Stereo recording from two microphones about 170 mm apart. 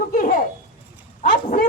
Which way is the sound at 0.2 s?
50° left (ahead or behind).